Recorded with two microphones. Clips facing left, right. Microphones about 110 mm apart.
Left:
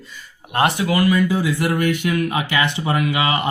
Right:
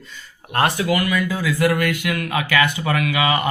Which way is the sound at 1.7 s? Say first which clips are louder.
Left 2 dB; 70° right (ahead or behind).